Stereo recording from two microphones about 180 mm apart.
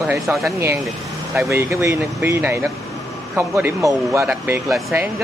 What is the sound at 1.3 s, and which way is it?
Speech, 15° right (ahead or behind).